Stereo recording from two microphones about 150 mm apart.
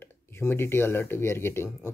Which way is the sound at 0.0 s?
15° left (ahead or behind).